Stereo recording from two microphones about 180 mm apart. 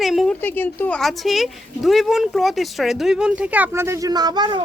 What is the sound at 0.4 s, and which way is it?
Speech, 10° left (ahead or behind).